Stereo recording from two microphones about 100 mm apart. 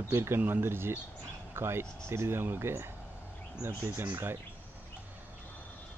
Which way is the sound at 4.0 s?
20° right (ahead or behind).